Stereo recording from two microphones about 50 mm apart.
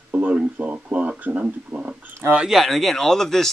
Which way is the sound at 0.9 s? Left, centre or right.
Right.